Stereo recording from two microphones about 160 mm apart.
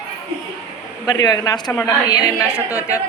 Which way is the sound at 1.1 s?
25° left (ahead or behind).